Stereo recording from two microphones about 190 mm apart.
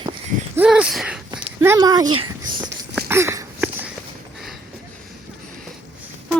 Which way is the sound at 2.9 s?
10° right (ahead or behind).